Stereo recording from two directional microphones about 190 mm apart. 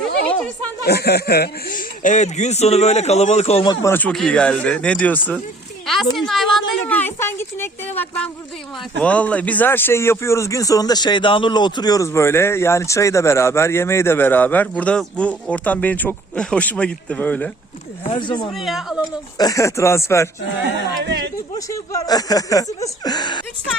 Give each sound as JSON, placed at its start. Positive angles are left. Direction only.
{"t": 0.9, "sound": "speech", "side_deg": 55}
{"t": 3.8, "sound": "speech", "side_deg": 10}
{"t": 5.8, "sound": "a sound", "side_deg": 0}
{"t": 6.1, "sound": "speech", "side_deg": 0}
{"t": 9.0, "sound": "speech", "side_deg": 5}
{"t": 18.1, "sound": "speech", "side_deg": 25}
{"t": 18.5, "sound": "speech", "side_deg": 0}
{"t": 19.4, "sound": "speech", "side_deg": 15}
{"t": 21.7, "sound": "speech", "side_deg": 20}